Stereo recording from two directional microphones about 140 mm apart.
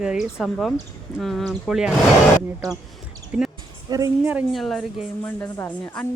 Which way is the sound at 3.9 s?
30° right (ahead or behind).